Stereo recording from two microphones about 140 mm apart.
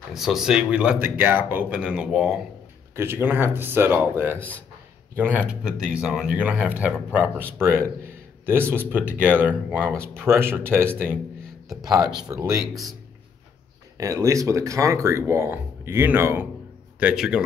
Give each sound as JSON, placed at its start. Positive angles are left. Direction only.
{"t": 0.1, "sound": "speech", "side_deg": 0}
{"t": 3.0, "sound": "speech", "side_deg": -15}
{"t": 12.2, "sound": "speech", "side_deg": -20}
{"t": 13.9, "sound": "speech", "side_deg": -25}
{"t": 17.0, "sound": "a man's voice", "side_deg": -5}